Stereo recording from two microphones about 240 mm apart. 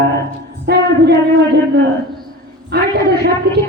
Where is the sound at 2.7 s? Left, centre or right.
Right.